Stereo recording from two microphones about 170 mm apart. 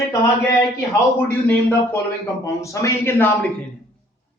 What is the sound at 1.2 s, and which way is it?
A man's voice, 10° left (ahead or behind).